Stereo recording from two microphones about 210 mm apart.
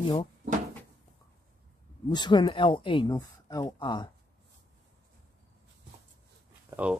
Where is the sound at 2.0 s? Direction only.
20° left (ahead or behind).